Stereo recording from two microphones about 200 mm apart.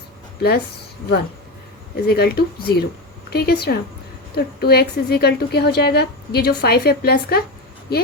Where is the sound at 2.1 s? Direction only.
50° left (ahead or behind).